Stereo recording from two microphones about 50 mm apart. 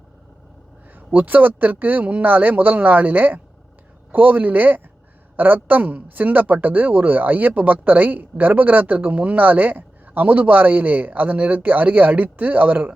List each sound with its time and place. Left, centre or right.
0.9 s a woman's voice: right